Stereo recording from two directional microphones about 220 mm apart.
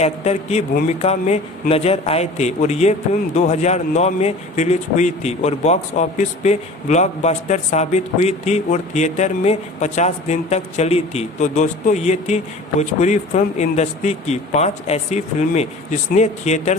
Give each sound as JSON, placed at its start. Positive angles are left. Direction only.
{"t": 0.0, "sound": "a man's voice", "side_deg": 30}
{"t": 0.7, "sound": "a man's voice", "side_deg": 40}